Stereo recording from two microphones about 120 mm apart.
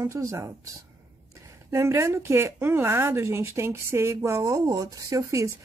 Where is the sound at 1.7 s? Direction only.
25° right (ahead or behind).